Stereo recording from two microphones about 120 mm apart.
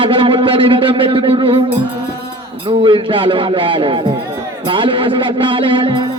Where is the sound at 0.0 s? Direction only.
45° right (ahead or behind).